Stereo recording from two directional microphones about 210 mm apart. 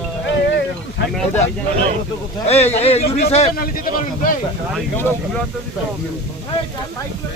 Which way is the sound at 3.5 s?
45° left (ahead or behind).